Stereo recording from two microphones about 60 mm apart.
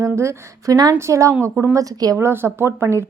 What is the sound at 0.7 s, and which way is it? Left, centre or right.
Speech, right.